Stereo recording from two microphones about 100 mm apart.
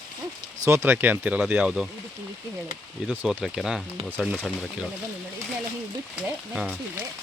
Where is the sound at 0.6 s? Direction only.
30° right (ahead or behind); by 1.9 s 10° right (ahead or behind).